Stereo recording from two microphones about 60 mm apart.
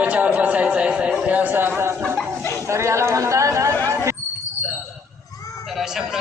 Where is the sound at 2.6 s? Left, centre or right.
Right.